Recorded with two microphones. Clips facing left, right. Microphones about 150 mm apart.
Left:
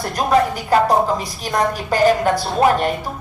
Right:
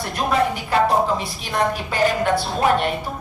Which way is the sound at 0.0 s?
40° left (ahead or behind).